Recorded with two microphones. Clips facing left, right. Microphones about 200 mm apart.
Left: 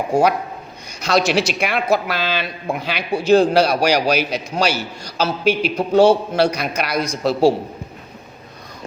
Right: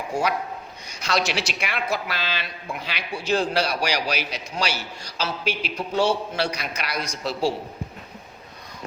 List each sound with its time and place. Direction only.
0.1 s a man's voice: 50° left (ahead or behind)